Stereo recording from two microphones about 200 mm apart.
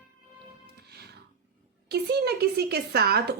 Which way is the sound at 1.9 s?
55° right (ahead or behind).